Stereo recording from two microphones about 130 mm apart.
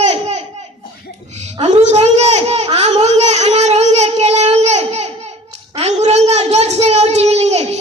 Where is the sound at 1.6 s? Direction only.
60° right (ahead or behind).